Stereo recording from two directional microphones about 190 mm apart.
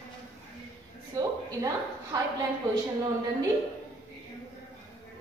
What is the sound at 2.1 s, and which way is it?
Speech, 20° right (ahead or behind).